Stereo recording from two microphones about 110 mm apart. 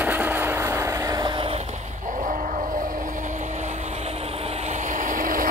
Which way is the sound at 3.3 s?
90° right.